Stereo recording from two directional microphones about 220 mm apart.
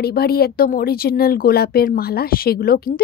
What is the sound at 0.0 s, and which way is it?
Speech, 45° left (ahead or behind).